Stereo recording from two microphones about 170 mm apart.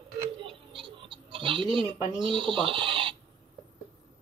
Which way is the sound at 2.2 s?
30° right (ahead or behind).